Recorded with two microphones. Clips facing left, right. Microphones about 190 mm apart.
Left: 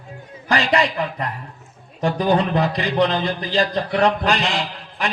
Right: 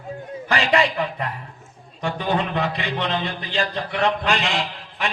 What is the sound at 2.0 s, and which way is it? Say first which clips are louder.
Speech: left 5 dB; 35° left (ahead or behind).